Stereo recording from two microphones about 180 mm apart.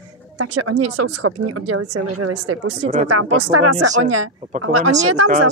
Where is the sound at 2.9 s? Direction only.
40° right (ahead or behind).